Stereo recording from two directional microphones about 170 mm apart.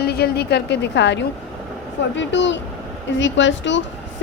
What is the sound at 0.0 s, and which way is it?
A woman's voice, 70° left (ahead or behind).